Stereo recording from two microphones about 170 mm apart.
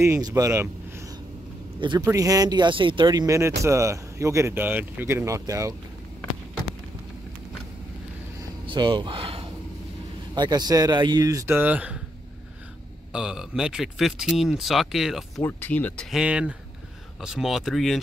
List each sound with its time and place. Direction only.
0.0 s speech: 15° right (ahead or behind)
1.8 s speech: 30° right (ahead or behind)
8.6 s speech: 30° right (ahead or behind); by 12.0 s 10° right (ahead or behind)
13.1 s speech: 5° right (ahead or behind)
15.4 s speech: 10° left (ahead or behind)
16.1 s speech: 5° right (ahead or behind)